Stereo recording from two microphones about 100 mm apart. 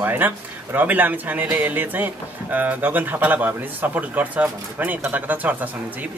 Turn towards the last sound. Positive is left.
turn(degrees=-15)  # may be behind; listen again after turning